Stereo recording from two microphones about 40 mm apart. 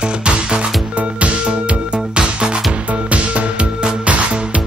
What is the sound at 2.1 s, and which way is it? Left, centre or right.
Music, right.